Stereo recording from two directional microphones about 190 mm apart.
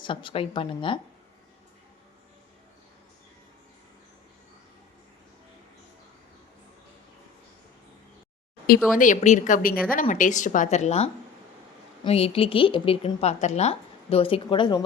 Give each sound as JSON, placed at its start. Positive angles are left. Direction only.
{"t": 0.0, "sound": "a woman's voice", "side_deg": 25}
{"t": 9.0, "sound": "a woman's voice", "side_deg": 40}